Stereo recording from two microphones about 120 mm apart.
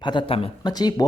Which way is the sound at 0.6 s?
35° left (ahead or behind).